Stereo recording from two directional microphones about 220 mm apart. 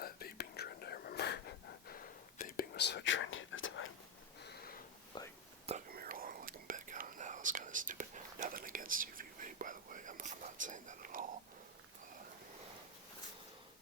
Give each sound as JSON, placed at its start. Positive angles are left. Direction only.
{"t": 0.0, "sound": "whispering", "side_deg": 45}
{"t": 4.4, "sound": "a sound", "side_deg": 45}
{"t": 5.1, "sound": "whispering", "side_deg": 20}
{"t": 5.9, "sound": "whispering", "side_deg": -40}